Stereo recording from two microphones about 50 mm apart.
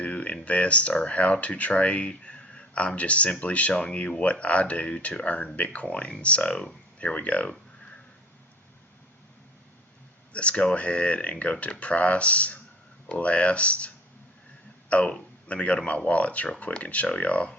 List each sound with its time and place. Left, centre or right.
0.0 s a sound: left
0.4 s speech: left
10.3 s speech: left